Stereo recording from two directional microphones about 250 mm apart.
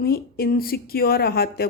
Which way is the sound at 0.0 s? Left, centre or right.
Left.